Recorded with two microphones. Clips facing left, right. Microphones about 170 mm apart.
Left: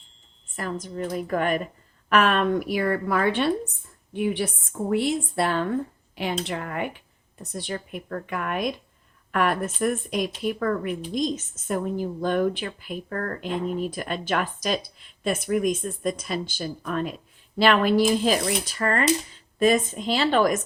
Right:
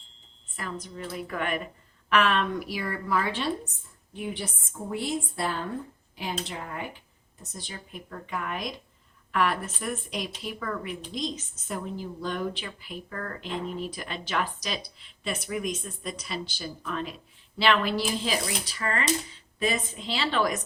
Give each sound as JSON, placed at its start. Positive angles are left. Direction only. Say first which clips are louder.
{"t": 0.5, "sound": "a woman's voice", "louder": "left 6 dB", "side_deg": 45}